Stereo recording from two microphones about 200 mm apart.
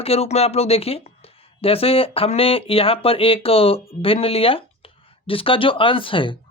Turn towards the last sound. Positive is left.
turn(degrees=25)  # may be behind; listen again after turning